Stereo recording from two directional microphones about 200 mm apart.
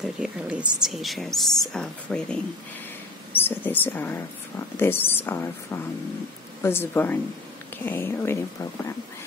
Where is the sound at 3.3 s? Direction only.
10° left (ahead or behind).